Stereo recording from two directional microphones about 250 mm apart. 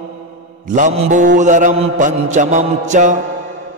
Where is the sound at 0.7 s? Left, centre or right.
Right.